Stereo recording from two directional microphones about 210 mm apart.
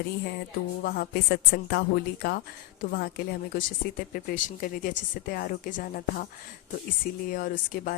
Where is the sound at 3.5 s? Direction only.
40° left (ahead or behind).